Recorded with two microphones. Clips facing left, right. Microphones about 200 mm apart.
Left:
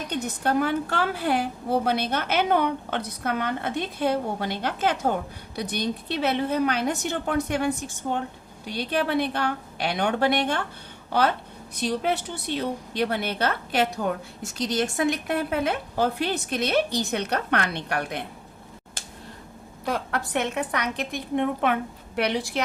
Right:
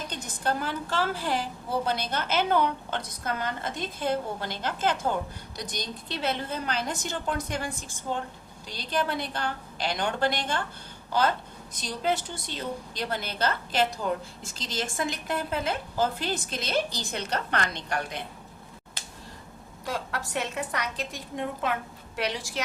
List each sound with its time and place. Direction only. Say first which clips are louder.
0.1 s a woman's voice: left 7 dB; 60° left (ahead or behind)
19.8 s a woman's voice: left 5 dB; 60° left (ahead or behind)